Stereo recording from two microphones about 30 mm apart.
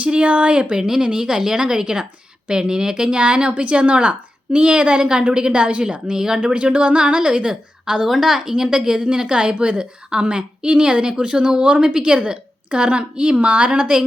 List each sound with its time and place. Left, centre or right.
0.2 s speech: right
0.8 s a woman's voice: centre
3.2 s a woman's voice: right
6.1 s a woman's voice: right
6.4 s a woman's voice: right
8.0 s a woman's voice: centre
8.5 s a woman's voice: right
13.7 s a woman's voice: right